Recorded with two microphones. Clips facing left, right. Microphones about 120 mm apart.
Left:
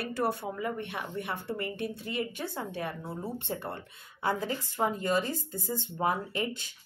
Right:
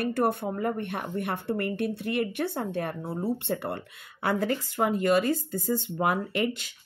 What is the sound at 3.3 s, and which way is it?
Speech, 85° right.